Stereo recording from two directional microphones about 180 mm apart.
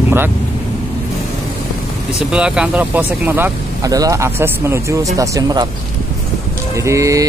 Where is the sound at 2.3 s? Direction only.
5° right (ahead or behind); by 5.6 s 20° right (ahead or behind).